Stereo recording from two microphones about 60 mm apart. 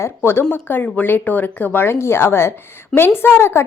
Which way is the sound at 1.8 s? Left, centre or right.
Left.